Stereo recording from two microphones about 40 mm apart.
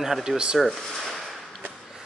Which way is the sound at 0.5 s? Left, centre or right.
Centre.